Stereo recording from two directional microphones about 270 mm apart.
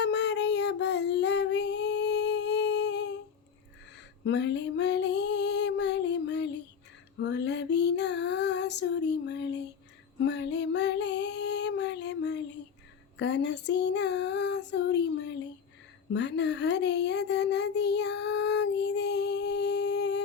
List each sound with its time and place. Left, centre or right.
0.0 s female singing: left
4.2 s female singing: left
16.1 s a sound: left